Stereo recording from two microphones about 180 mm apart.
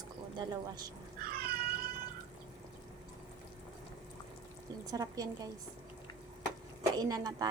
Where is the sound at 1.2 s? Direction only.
55° right (ahead or behind).